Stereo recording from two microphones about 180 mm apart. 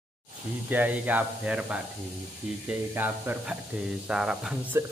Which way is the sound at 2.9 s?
10° right (ahead or behind).